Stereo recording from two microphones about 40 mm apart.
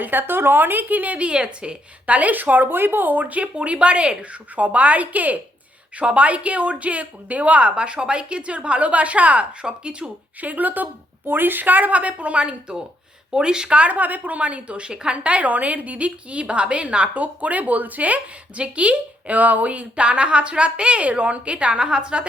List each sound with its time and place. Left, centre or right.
0.0 s a woman's voice: right
1.3 s speech: right
2.0 s speech: right
3.4 s a woman's voice: right
10.4 s speech: right
11.3 s a woman's voice: right
13.8 s a woman's voice: right